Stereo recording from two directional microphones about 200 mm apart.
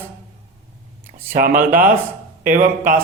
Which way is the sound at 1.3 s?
45° right (ahead or behind).